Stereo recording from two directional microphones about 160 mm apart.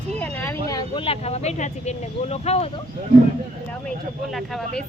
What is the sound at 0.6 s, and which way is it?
Speech, 25° left (ahead or behind).